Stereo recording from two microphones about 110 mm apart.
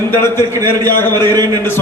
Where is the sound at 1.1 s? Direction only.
40° right (ahead or behind).